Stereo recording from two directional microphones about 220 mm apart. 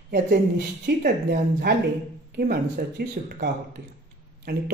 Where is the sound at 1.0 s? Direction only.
45° right (ahead or behind).